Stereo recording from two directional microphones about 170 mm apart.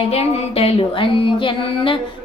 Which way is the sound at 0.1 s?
35° left (ahead or behind).